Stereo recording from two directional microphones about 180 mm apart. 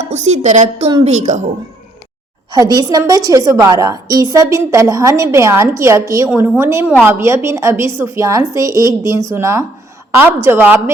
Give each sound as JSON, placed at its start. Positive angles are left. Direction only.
{"t": 0.0, "sound": "a woman's voice", "side_deg": -40}
{"t": 2.5, "sound": "a woman's voice", "side_deg": -20}